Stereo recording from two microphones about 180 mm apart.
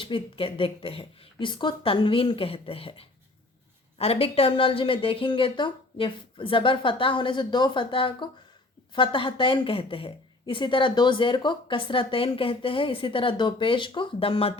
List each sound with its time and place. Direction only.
0.0 s a woman's voice: 30° left (ahead or behind)